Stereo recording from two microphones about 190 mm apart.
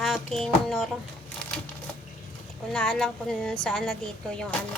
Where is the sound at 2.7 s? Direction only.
5° left (ahead or behind).